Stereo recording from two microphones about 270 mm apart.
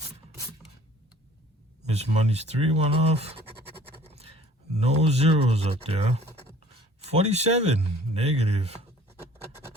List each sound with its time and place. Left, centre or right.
1.9 s speech: right